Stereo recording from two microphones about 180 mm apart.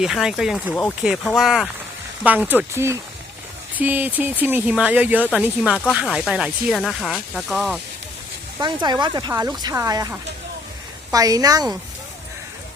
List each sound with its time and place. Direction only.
0.0 s speech: 5° right (ahead or behind)
8.6 s speech: 25° right (ahead or behind)